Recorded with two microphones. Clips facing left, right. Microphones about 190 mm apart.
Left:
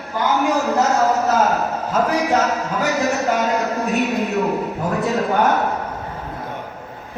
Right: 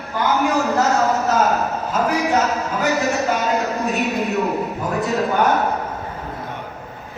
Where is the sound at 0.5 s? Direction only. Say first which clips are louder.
Even; centre (ahead or behind).